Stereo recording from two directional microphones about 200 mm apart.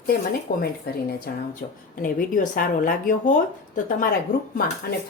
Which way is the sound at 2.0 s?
45° left (ahead or behind).